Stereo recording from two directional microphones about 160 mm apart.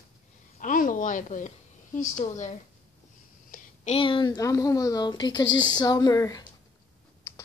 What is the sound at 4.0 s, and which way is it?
Speech, 30° left (ahead or behind).